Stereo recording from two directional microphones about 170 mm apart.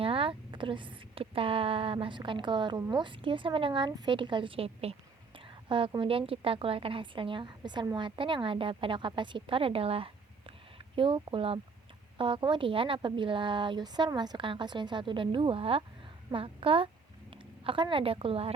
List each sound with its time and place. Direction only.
0.0 s a woman's voice: 30° right (ahead or behind)